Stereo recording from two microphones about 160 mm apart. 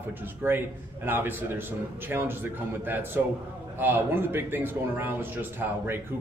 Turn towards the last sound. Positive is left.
turn(degrees=-15)  # may be behind; listen again after turning